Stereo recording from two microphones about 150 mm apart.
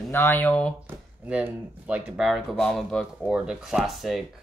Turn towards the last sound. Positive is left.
turn(degrees=0)  # may be behind; listen again after turning